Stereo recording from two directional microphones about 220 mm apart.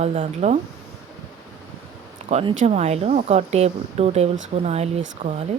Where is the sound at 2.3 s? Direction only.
25° right (ahead or behind).